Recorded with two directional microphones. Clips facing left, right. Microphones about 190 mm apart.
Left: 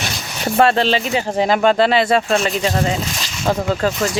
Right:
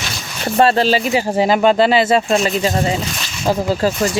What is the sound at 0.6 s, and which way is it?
Speech, centre (ahead or behind).